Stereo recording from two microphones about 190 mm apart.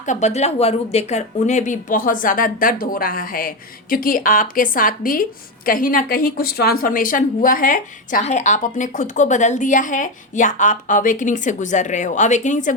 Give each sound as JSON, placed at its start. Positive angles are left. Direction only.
{"t": 0.0, "sound": "a woman's voice", "side_deg": 40}